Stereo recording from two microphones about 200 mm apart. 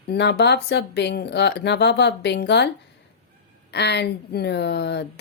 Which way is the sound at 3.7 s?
60° left (ahead or behind).